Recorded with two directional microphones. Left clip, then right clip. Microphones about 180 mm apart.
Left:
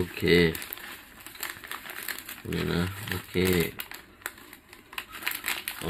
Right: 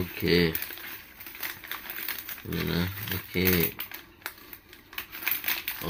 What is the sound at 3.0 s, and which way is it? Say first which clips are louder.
Speech: left 1 dB; 10° left (ahead or behind).